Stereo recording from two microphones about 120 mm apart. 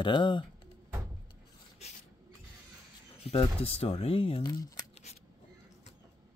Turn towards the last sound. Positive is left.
turn(degrees=30)  # may be behind; listen again after turning